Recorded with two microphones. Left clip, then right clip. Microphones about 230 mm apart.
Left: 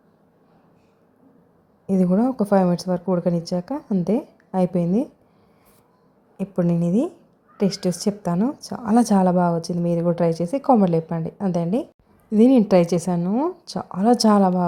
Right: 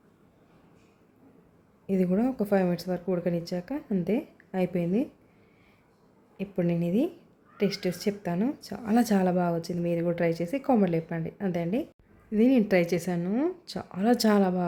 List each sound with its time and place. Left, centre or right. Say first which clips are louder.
1.9 s speech: left 6 dB; centre
6.3 s speech: left 6 dB; centre